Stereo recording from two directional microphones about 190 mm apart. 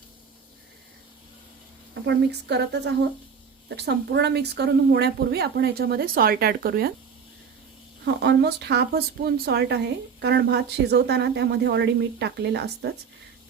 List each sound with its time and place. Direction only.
2.0 s a woman's voice: 60° right (ahead or behind)
8.0 s a woman's voice: 60° right (ahead or behind)